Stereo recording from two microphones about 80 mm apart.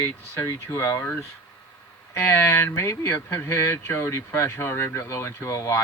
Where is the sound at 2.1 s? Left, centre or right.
Left.